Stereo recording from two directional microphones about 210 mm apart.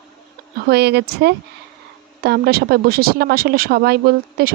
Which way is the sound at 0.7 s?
50° right (ahead or behind).